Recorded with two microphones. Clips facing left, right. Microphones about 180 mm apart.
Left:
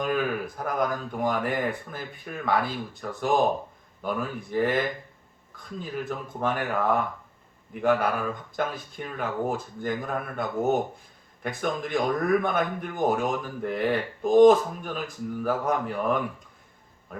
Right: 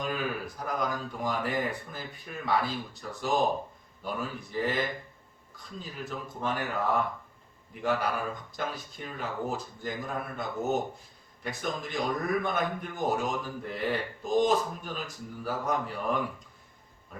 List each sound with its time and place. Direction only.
0.0 s a man's voice: 55° left (ahead or behind)
5.8 s a man's voice: 55° left (ahead or behind)